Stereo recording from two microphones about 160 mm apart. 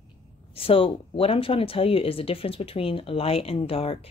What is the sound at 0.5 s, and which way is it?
Speech, 35° left (ahead or behind).